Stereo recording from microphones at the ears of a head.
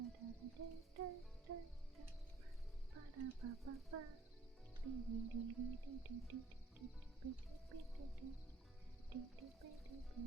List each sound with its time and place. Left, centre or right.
0.0 s music: right
2.9 s speech: right
4.8 s music: right